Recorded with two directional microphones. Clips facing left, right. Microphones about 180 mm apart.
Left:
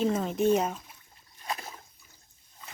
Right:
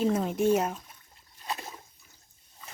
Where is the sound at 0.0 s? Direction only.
10° right (ahead or behind).